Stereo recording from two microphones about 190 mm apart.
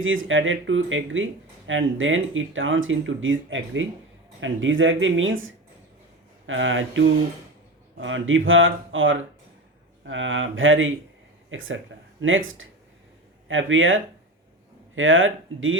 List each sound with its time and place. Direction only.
0.0 s speech: 90° right